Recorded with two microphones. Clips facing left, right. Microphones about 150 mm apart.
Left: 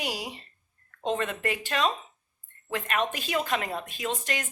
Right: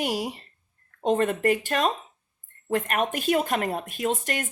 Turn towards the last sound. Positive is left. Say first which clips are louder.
# right 4 dB
turn(degrees=-50)  # may be behind; listen again after turning